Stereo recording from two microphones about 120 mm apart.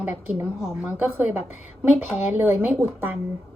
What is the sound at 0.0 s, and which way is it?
A woman's voice, 15° right (ahead or behind).